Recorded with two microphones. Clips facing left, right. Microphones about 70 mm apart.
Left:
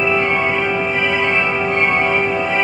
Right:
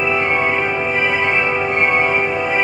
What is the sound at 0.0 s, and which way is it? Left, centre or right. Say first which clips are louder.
Music: left 1 dB; centre.